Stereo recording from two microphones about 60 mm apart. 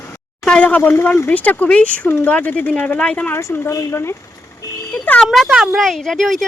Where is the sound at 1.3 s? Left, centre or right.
Left.